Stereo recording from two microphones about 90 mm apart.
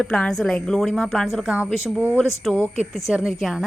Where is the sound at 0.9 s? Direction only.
Centre (ahead or behind).